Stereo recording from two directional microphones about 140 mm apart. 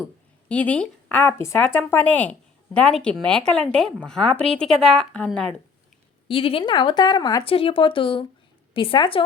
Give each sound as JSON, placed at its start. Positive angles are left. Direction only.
{"t": 0.4, "sound": "speech", "side_deg": 10}
{"t": 6.2, "sound": "a woman's voice", "side_deg": 40}
{"t": 7.4, "sound": "a woman's voice", "side_deg": 40}